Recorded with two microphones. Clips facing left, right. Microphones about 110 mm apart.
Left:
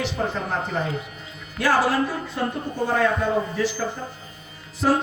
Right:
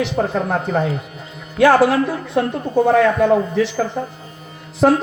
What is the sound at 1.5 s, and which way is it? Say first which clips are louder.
Speech: right 8 dB; 65° right (ahead or behind).